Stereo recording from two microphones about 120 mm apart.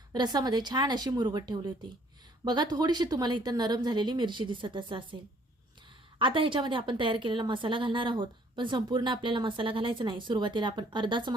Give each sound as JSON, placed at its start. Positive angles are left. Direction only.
{"t": 0.1, "sound": "speech", "side_deg": -35}
{"t": 6.1, "sound": "a woman's voice", "side_deg": -45}